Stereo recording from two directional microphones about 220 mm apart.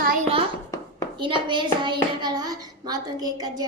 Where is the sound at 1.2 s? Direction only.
20° right (ahead or behind).